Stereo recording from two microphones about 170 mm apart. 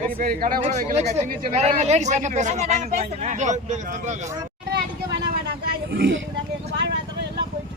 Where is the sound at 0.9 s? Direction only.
40° right (ahead or behind).